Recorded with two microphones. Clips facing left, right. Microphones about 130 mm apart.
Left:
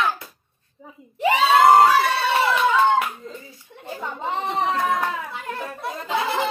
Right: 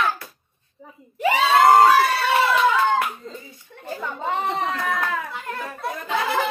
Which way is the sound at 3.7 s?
20° left (ahead or behind).